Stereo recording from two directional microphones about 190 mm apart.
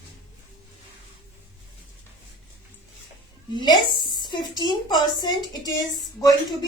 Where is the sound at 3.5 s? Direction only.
25° left (ahead or behind).